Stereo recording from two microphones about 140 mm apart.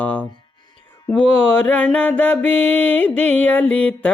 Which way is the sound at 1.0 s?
10° left (ahead or behind).